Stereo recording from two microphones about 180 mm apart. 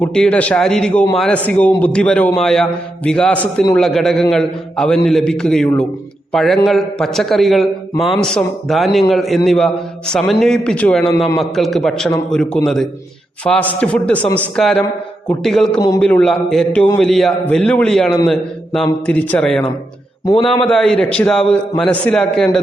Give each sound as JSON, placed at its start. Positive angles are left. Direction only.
{"t": 0.0, "sound": "a man's voice", "side_deg": 5}
{"t": 20.4, "sound": "a man's voice", "side_deg": 25}
{"t": 20.7, "sound": "a man's voice", "side_deg": 5}